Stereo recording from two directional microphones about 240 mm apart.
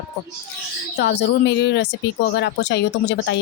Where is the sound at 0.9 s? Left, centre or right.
Left.